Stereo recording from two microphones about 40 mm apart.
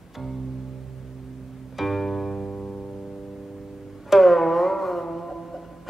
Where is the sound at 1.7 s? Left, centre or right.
Centre.